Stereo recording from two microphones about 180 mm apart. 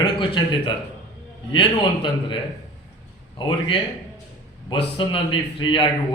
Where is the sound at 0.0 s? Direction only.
30° left (ahead or behind).